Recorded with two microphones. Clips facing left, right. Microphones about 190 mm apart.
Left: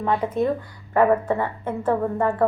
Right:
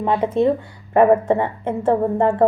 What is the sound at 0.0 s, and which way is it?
A woman's voice, 20° right (ahead or behind).